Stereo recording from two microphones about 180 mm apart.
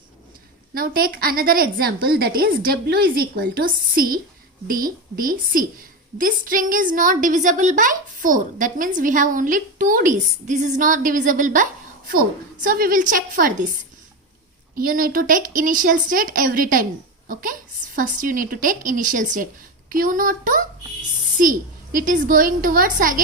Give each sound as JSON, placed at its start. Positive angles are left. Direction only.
{"t": 0.7, "sound": "a woman's voice", "side_deg": -55}
{"t": 14.8, "sound": "a woman's voice", "side_deg": -50}
{"t": 22.0, "sound": "a woman's voice", "side_deg": -50}